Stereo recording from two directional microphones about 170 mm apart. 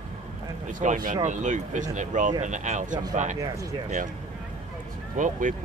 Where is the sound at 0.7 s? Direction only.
50° right (ahead or behind).